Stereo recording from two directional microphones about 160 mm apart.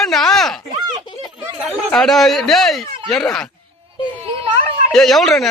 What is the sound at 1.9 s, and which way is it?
Speech, centre (ahead or behind).